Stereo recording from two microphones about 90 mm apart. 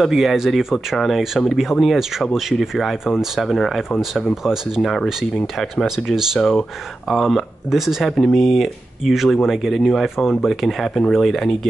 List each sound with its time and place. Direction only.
0.0 s speech: centre (ahead or behind)